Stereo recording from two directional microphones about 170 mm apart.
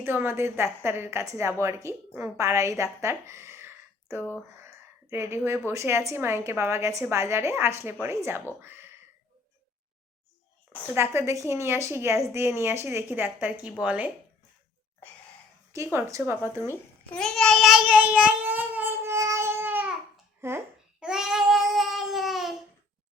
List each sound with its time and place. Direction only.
0.0 s a woman's voice: 15° right (ahead or behind)
4.1 s speech: 15° left (ahead or behind)
4.5 s a woman's voice: 15° right (ahead or behind)
10.9 s a woman's voice: 15° right (ahead or behind)
15.7 s a woman's voice: 15° right (ahead or behind)
17.2 s child singing: 5° left (ahead or behind); by 19.9 s 10° right (ahead or behind)
20.4 s a woman's voice: 15° right (ahead or behind)
21.0 s babbling: 5° right (ahead or behind)